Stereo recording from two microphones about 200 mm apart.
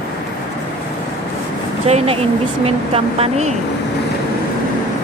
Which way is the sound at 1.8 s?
30° right (ahead or behind).